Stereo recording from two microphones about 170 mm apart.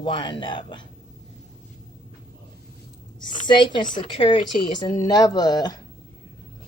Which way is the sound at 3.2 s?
25° left (ahead or behind).